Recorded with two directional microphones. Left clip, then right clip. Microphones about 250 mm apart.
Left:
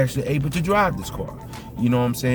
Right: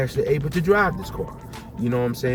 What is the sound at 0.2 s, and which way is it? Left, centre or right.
Speech, centre.